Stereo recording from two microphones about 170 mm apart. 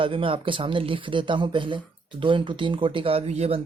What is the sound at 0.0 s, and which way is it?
Speech, 30° right (ahead or behind).